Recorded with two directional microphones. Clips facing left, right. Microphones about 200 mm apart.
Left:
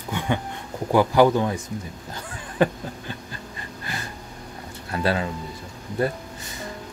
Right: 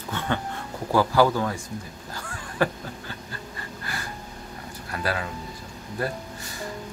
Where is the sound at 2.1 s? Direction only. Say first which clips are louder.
Left 4 dB; 20° left (ahead or behind).